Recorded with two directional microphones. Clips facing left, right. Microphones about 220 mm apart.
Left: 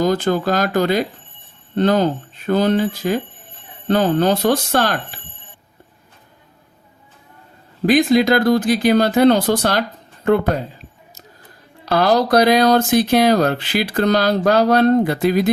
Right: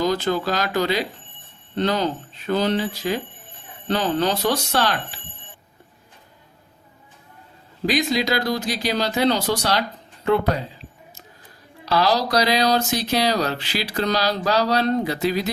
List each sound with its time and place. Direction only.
0.0 s speech: 50° left (ahead or behind)
7.9 s speech: 50° left (ahead or behind)
11.9 s speech: 50° left (ahead or behind)